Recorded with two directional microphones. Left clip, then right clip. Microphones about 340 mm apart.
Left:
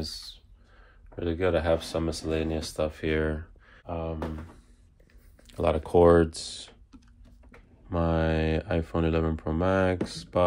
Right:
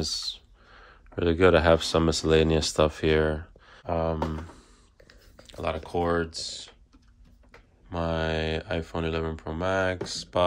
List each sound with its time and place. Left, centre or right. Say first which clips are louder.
0.0 s speech: right 7 dB; right
5.5 s speech: left 5 dB; centre
7.9 s speech: left 1 dB; centre